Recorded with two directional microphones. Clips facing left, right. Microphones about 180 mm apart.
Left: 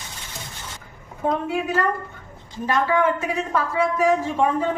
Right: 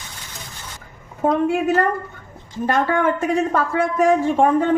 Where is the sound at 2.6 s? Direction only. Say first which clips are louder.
Right 2 dB; 50° right (ahead or behind).